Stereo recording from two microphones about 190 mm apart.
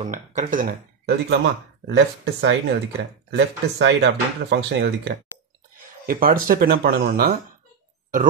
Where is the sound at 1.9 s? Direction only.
65° right (ahead or behind).